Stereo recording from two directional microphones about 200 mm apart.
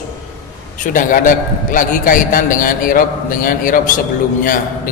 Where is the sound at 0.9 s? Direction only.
40° left (ahead or behind).